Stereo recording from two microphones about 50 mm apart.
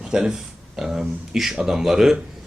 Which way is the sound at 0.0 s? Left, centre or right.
Centre.